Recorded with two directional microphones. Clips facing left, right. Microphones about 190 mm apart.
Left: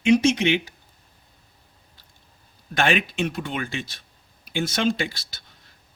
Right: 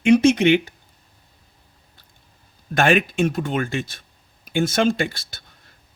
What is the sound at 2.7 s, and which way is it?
Speech, 50° right (ahead or behind).